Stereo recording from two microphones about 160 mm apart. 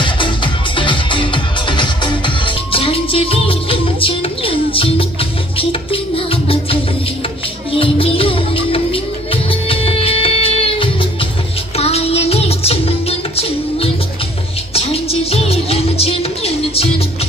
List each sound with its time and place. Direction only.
0.0 s music: 30° left (ahead or behind)